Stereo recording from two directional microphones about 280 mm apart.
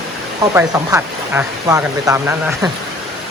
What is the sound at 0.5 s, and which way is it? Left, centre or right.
Speech, centre.